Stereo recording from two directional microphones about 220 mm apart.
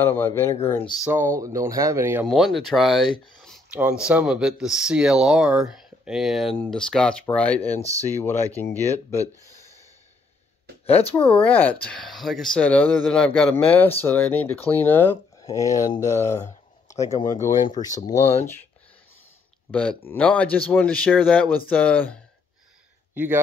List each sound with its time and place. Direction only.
0.0 s speech: 10° left (ahead or behind)
0.9 s speech: 5° right (ahead or behind)
2.2 s speech: centre (ahead or behind)
7.6 s speech: 30° left (ahead or behind)
8.1 s speech: 10° left (ahead or behind)
10.9 s speech: 25° left (ahead or behind)
11.4 s speech: 5° left (ahead or behind)
19.7 s speech: 5° left (ahead or behind)
23.1 s speech: 10° right (ahead or behind)